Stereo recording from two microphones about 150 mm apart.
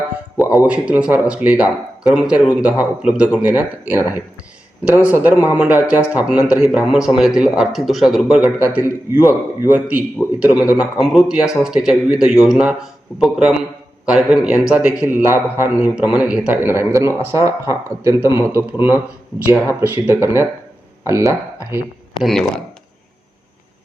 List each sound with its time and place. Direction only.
0.6 s a man's voice: 10° right (ahead or behind)
22.2 s a man's voice: centre (ahead or behind)